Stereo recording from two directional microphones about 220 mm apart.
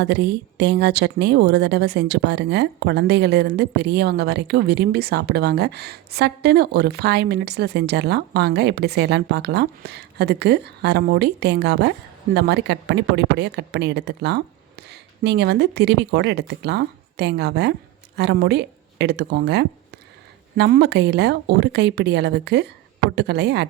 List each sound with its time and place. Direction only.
0.0 s a woman's voice: 50° right (ahead or behind)